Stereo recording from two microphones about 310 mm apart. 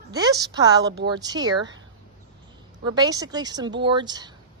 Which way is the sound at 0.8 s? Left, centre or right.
Right.